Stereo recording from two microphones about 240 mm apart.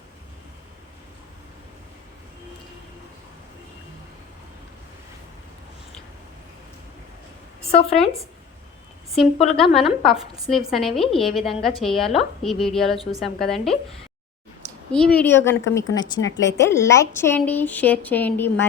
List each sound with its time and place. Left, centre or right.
7.7 s speech: left
9.7 s a woman's voice: centre
14.9 s a woman's voice: centre